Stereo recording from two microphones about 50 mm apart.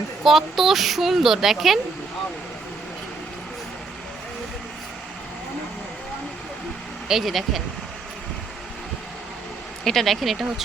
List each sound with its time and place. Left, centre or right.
0.3 s speech: centre
7.1 s speech: centre
9.8 s speech: centre